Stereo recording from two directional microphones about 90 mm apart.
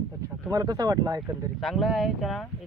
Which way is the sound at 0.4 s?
40° right (ahead or behind).